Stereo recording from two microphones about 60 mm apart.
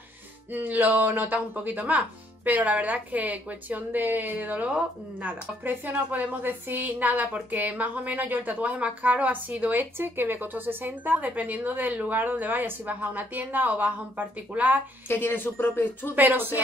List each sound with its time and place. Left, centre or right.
0.5 s a woman's voice: right
5.2 s a woman's voice: right
15.0 s a woman's voice: left
16.2 s a woman's voice: right